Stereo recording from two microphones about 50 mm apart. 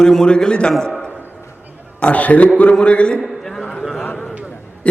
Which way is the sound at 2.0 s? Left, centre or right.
Left.